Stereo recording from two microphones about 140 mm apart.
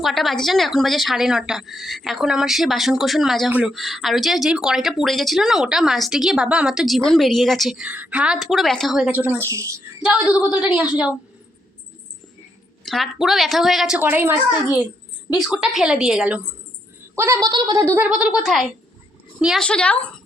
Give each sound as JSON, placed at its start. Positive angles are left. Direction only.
{"t": 0.0, "sound": "speech", "side_deg": 0}
{"t": 9.5, "sound": "speech", "side_deg": -20}
{"t": 10.3, "sound": "a woman's voice", "side_deg": -10}
{"t": 12.8, "sound": "speech", "side_deg": 0}
{"t": 15.3, "sound": "speech", "side_deg": -5}
{"t": 17.2, "sound": "a woman's voice", "side_deg": -15}
{"t": 17.4, "sound": "speech", "side_deg": -30}
{"t": 18.1, "sound": "a woman's voice", "side_deg": -5}